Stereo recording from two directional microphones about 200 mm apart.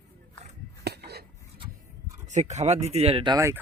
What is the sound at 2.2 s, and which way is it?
Speech, 35° right (ahead or behind).